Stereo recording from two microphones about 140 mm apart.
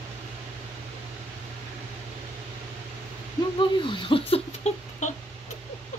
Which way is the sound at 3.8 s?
40° left (ahead or behind).